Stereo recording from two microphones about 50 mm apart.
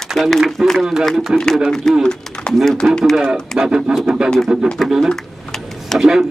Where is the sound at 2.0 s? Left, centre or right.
Centre.